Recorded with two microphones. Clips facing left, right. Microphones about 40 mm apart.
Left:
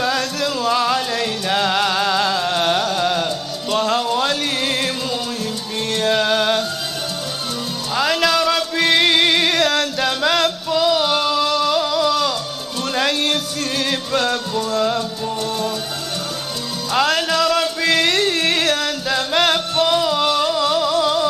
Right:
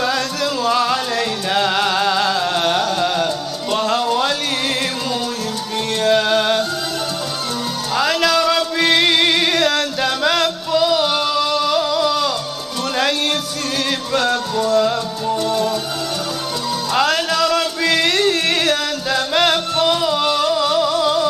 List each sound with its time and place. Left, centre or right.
0.0 s music: centre
6.0 s music: centre
7.9 s music: centre
16.9 s music: centre